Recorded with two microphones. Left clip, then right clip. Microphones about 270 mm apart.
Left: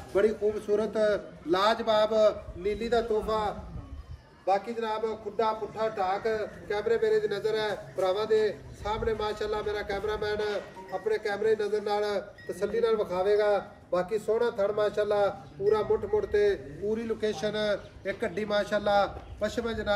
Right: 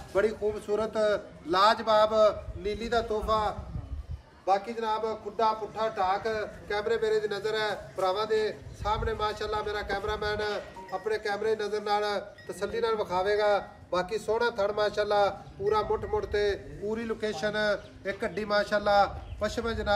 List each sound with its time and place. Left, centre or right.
0.1 s a man's voice: centre